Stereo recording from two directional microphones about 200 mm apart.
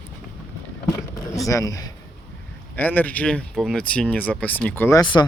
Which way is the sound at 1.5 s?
15° left (ahead or behind).